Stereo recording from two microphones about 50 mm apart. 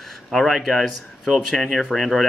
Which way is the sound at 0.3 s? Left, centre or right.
Centre.